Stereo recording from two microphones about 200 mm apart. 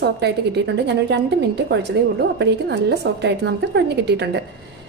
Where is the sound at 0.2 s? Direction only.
60° right (ahead or behind).